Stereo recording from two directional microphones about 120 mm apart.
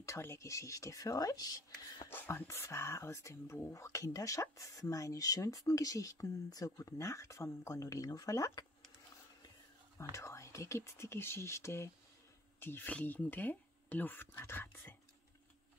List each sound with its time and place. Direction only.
0.0 s speech: 25° left (ahead or behind)
2.0 s speech: 20° left (ahead or behind)
10.1 s speech: 25° left (ahead or behind)